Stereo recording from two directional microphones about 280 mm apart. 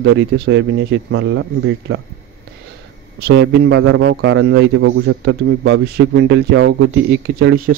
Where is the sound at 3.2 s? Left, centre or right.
Right.